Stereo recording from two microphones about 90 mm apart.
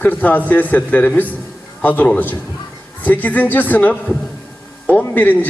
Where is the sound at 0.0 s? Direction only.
20° left (ahead or behind).